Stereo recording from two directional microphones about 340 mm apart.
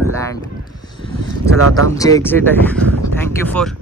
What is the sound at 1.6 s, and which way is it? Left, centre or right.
Speech, right.